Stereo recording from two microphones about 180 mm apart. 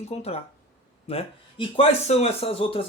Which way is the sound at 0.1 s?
35° left (ahead or behind).